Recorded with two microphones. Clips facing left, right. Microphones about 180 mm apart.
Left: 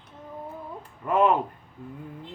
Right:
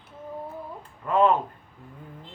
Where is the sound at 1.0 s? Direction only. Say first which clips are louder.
Right 1 dB; 10° left (ahead or behind).